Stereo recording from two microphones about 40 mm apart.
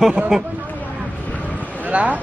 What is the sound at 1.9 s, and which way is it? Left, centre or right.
Speech, right.